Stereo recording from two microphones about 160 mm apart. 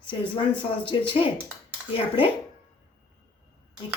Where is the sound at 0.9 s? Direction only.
30° left (ahead or behind).